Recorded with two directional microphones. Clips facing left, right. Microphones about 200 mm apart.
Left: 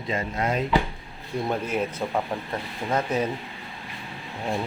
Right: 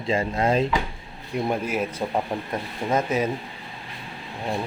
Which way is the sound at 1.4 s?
10° right (ahead or behind).